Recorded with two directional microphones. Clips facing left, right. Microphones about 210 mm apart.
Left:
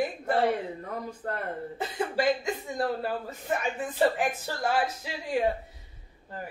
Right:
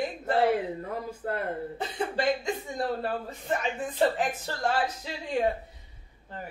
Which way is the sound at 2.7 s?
5° left (ahead or behind).